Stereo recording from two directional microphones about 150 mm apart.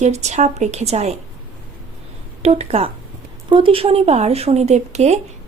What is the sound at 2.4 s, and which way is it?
Speech, 45° right (ahead or behind).